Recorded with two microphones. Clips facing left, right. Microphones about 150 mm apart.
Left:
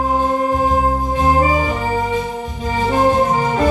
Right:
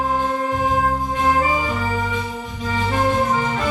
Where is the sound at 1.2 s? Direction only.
30° left (ahead or behind).